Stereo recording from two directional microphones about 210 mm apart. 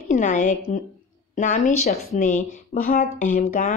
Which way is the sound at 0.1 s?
35° left (ahead or behind).